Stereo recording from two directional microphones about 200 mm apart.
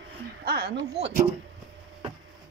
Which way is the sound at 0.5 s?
50° right (ahead or behind).